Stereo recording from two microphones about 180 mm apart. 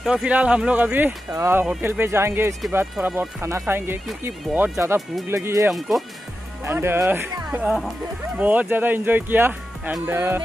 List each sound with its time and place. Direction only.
0.0 s speech: 5° right (ahead or behind)
4.5 s speech: centre (ahead or behind)
4.7 s speech: 15° right (ahead or behind)
5.7 s speech: centre (ahead or behind)
6.6 s speech: 15° right (ahead or behind)